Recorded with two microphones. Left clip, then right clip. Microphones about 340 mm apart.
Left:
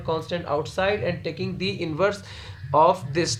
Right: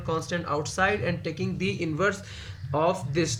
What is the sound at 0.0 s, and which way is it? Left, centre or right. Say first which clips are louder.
Speech: left 2 dB; centre.